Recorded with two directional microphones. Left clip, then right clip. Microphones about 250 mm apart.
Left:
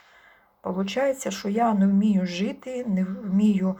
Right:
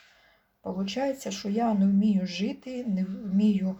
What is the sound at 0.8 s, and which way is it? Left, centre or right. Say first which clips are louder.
Speech: left 6 dB; centre.